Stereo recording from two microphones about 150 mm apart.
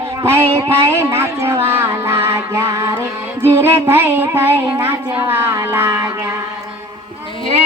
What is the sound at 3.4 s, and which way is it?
Music, 15° right (ahead or behind).